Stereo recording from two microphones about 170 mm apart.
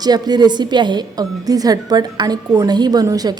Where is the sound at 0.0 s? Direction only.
25° right (ahead or behind).